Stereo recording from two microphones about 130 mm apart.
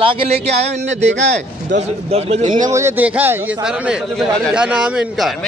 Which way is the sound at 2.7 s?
20° right (ahead or behind).